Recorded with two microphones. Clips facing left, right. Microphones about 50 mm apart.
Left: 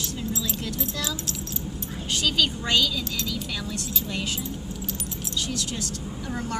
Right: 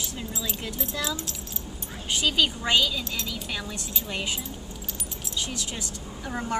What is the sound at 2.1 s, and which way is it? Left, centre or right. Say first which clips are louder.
A woman's voice: even; centre.